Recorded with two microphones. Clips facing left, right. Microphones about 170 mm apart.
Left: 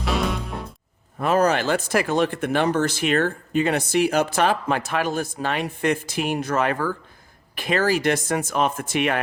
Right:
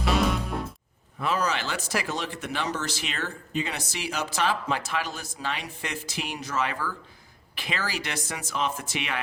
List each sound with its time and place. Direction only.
0.0 s music: centre (ahead or behind)
1.2 s speech: 50° left (ahead or behind)